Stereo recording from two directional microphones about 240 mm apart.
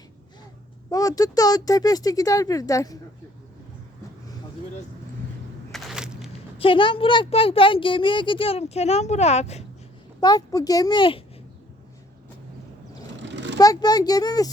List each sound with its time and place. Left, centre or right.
0.9 s speech: centre
5.7 s a sound: centre
6.6 s speech: left
10.2 s speech: centre
13.3 s a sound: right
13.6 s speech: centre